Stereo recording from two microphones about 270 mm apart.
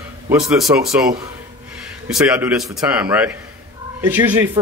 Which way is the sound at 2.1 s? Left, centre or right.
Centre.